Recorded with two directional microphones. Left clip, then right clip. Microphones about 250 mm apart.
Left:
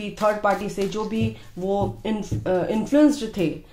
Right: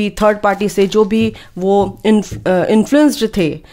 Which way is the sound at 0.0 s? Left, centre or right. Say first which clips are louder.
Right 8 dB; right.